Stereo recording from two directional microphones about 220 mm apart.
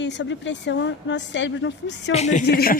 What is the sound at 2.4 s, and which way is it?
Speech, 40° left (ahead or behind).